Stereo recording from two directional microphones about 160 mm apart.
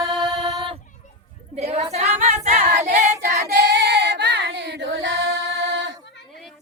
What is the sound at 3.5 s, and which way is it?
Singing, 90° right.